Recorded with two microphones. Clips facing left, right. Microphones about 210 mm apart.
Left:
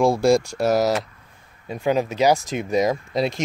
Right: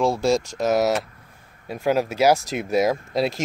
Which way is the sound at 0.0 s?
10° left (ahead or behind).